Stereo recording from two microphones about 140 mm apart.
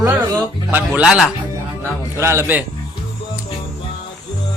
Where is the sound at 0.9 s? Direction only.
Centre (ahead or behind).